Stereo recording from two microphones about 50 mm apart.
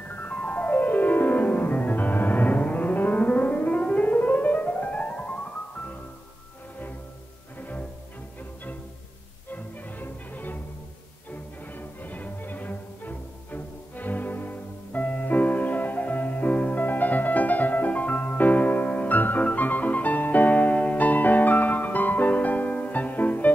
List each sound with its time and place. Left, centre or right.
0.0 s music: left
9.5 s music: left
11.7 s music: left